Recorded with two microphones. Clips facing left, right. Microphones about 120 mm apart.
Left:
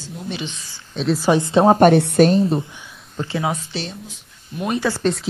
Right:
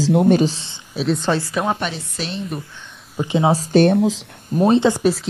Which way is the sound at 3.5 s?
40° right (ahead or behind).